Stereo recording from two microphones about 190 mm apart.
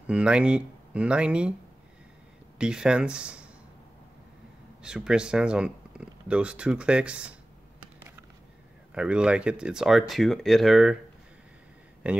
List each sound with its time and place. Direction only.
0.0 s speech: 5° right (ahead or behind)
2.6 s speech: 5° right (ahead or behind)
4.8 s speech: 5° right (ahead or behind)
8.9 s speech: 5° right (ahead or behind)
12.0 s speech: 5° right (ahead or behind)